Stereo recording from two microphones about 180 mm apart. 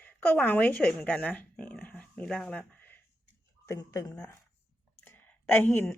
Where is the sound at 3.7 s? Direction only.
20° left (ahead or behind).